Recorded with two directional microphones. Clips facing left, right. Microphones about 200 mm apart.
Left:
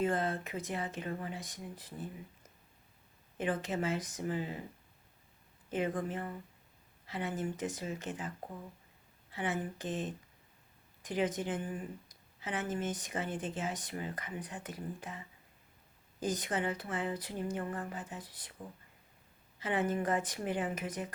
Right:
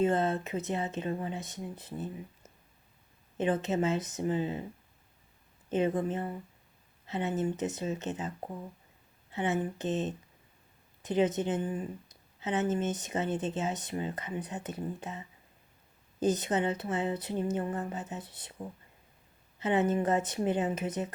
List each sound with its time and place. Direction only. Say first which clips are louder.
0.0 s speech: right 5 dB; 25° right (ahead or behind)
3.3 s speech: right 6 dB; 25° right (ahead or behind)
5.7 s speech: right 6 dB; 25° right (ahead or behind)
16.2 s speech: right 6 dB; 25° right (ahead or behind)
19.5 s speech: right 5 dB; 25° right (ahead or behind)